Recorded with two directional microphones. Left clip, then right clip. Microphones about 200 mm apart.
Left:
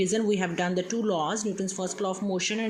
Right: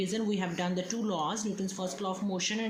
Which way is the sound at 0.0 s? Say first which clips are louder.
Left 7 dB; 30° left (ahead or behind).